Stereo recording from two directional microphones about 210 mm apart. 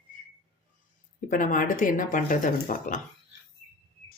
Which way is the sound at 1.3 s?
40° left (ahead or behind).